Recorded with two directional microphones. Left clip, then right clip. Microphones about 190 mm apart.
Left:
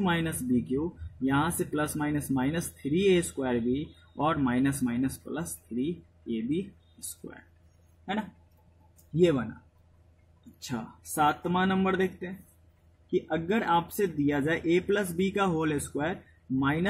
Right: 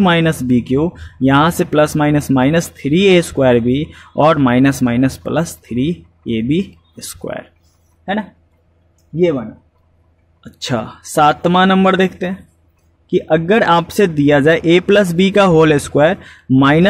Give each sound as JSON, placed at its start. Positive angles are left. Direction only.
{"t": 0.0, "sound": "speech", "side_deg": -45}
{"t": 8.0, "sound": "speech", "side_deg": -40}
{"t": 10.6, "sound": "speech", "side_deg": -45}